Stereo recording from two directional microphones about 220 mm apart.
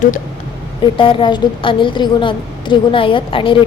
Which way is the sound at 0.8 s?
25° left (ahead or behind).